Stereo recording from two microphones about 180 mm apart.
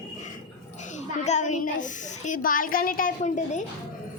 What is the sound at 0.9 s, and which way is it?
A woman's voice, 40° left (ahead or behind).